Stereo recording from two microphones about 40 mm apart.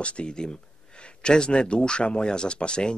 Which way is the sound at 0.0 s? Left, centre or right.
Left.